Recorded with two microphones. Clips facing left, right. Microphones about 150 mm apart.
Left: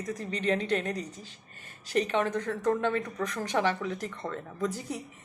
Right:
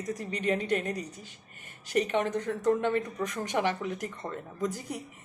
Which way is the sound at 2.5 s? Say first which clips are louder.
Right 1 dB; 60° left (ahead or behind).